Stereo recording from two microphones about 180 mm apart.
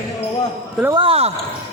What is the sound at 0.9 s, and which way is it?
Speech, 30° right (ahead or behind).